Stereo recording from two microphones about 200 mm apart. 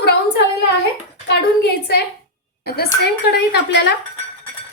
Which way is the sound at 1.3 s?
55° left (ahead or behind).